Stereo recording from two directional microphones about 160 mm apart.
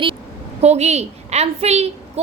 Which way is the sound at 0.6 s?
45° right (ahead or behind).